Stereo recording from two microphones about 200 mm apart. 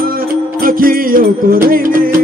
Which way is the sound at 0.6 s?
45° right (ahead or behind).